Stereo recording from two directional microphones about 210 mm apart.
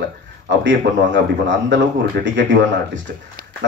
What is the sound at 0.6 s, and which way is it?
A man's voice, 60° right (ahead or behind).